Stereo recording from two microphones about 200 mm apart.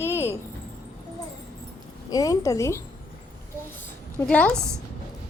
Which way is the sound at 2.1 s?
15° left (ahead or behind).